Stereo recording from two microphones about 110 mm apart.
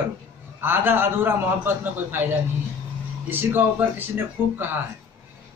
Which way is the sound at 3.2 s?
20° right (ahead or behind).